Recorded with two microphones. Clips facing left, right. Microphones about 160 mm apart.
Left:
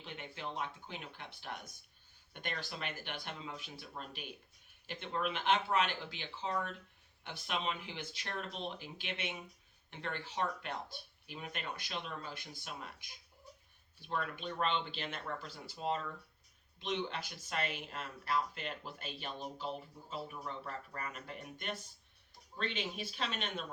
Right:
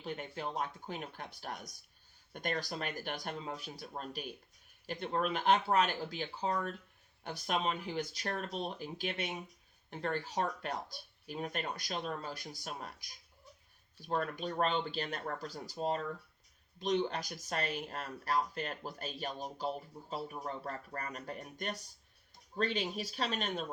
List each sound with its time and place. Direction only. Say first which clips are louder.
0.0 s speech: right 5 dB; 40° right (ahead or behind)